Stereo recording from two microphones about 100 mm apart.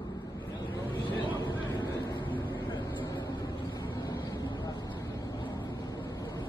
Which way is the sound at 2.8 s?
35° left (ahead or behind).